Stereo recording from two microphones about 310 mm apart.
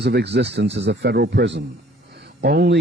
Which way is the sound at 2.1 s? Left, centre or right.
Right.